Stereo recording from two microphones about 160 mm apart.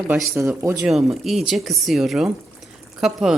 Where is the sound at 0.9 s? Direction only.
Centre (ahead or behind).